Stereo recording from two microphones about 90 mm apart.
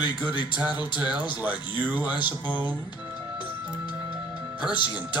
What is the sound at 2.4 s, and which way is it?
Speech, 20° right (ahead or behind).